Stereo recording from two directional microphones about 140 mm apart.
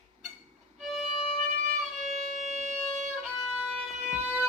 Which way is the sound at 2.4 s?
60° right (ahead or behind).